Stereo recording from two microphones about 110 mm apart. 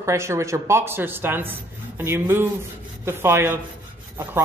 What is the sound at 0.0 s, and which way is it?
Speech, 25° right (ahead or behind).